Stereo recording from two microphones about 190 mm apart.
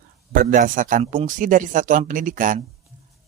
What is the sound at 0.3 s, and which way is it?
Speech, 45° right (ahead or behind).